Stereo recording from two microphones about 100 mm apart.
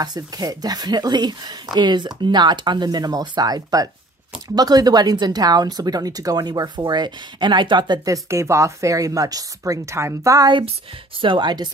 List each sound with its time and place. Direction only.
0.0 s speech: 40° right (ahead or behind)
8.1 s speech: 30° right (ahead or behind)
11.1 s speech: 55° right (ahead or behind)